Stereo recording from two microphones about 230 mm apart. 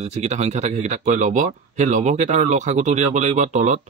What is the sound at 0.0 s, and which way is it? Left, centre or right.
Speech, right.